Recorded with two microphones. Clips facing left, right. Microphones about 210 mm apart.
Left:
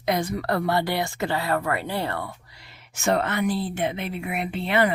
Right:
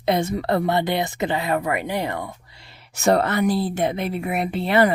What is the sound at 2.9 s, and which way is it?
Speech, 40° right (ahead or behind).